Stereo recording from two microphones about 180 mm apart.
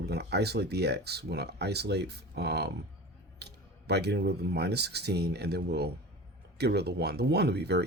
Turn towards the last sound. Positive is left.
turn(degrees=-65)  # may be behind; listen again after turning